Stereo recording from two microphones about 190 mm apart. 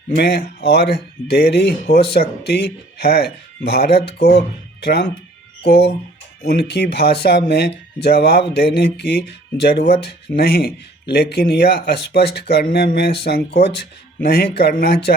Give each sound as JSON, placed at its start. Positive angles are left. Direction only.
{"t": 0.2, "sound": "speech", "side_deg": 60}